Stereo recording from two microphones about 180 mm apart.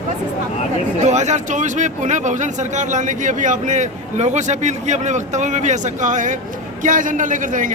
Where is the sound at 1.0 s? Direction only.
40° right (ahead or behind).